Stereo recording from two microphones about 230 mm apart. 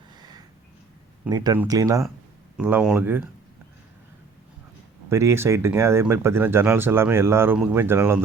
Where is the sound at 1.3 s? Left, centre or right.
Centre.